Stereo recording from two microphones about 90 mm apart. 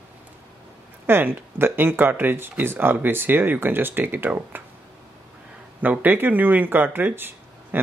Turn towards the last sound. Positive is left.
turn(degrees=-25)  # may be behind; listen again after turning